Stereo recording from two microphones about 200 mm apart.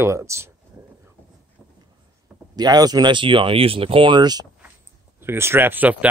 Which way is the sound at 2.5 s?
20° right (ahead or behind).